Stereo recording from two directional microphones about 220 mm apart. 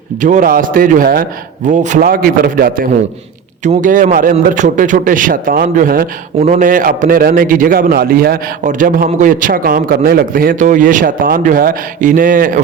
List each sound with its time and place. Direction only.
0.2 s a man's voice: 35° right (ahead or behind)